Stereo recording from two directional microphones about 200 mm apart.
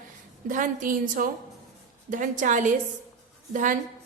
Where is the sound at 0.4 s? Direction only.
40° right (ahead or behind).